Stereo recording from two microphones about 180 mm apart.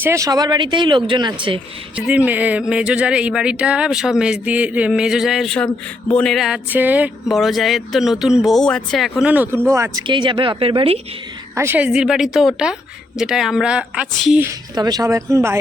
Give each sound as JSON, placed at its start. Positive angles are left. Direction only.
{"t": 0.0, "sound": "speech", "side_deg": -15}
{"t": 2.0, "sound": "speech", "side_deg": -5}
{"t": 10.1, "sound": "speech", "side_deg": -25}
{"t": 11.5, "sound": "speech", "side_deg": -10}
{"t": 14.4, "sound": "a woman's voice", "side_deg": -20}